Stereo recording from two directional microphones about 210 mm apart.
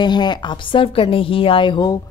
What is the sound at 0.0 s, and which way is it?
A man's voice, 20° left (ahead or behind).